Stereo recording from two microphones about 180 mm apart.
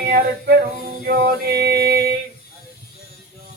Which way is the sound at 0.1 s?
65° right (ahead or behind).